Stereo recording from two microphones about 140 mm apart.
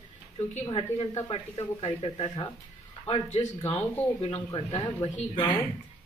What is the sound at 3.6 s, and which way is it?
Speech, 45° left (ahead or behind).